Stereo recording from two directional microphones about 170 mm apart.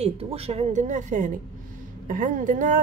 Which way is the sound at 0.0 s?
35° right (ahead or behind).